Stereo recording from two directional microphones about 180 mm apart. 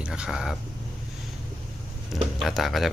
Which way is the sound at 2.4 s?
Centre (ahead or behind).